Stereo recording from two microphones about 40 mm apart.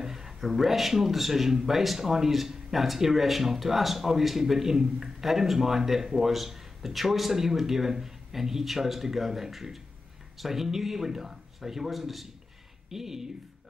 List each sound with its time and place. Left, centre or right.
0.0 s speech: centre